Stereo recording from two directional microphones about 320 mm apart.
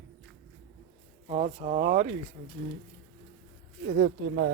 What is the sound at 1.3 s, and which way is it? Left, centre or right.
Speech, centre.